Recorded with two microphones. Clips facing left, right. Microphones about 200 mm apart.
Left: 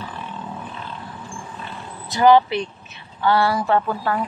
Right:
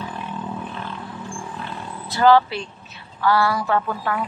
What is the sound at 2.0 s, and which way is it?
Speech, 15° left (ahead or behind).